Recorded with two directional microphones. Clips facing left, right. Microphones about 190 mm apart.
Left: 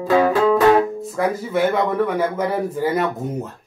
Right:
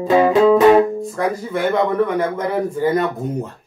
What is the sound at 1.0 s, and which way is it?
Music, 5° left (ahead or behind).